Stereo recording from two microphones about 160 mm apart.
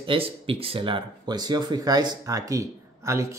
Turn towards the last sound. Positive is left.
turn(degrees=-20)  # may be behind; listen again after turning